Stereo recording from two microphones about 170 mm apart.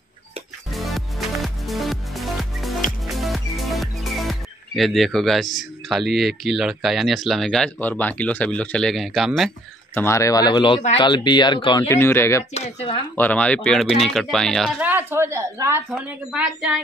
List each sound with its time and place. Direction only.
0.7 s music: centre (ahead or behind)
5.9 s speech: centre (ahead or behind)
9.9 s speech: 15° left (ahead or behind)
11.9 s speech: 15° left (ahead or behind)
12.5 s speech: 35° left (ahead or behind)
13.1 s speech: 10° left (ahead or behind)
14.8 s speech: 10° right (ahead or behind)
15.9 s speech: 5° right (ahead or behind)